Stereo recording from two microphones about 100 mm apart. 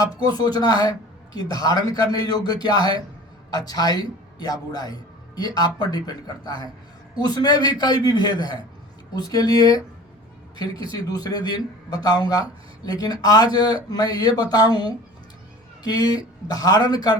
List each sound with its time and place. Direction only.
0.0 s a man's voice: 40° left (ahead or behind)